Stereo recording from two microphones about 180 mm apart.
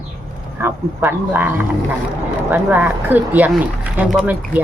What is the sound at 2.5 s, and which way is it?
Speech, 10° right (ahead or behind).